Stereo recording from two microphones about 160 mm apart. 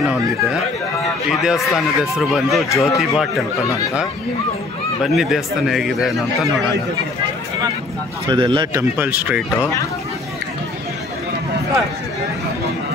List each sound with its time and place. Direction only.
1.4 s speech: 5° right (ahead or behind)
2.7 s speech: 20° left (ahead or behind)
3.0 s speech: centre (ahead or behind)
5.0 s speech: centre (ahead or behind)
8.3 s speech: 30° right (ahead or behind)
8.9 s speech: 10° right (ahead or behind)